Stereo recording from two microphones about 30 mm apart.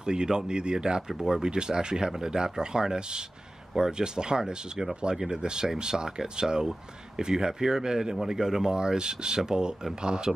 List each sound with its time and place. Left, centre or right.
0.0 s speech: right
5.4 s speech: right
8.7 s speech: right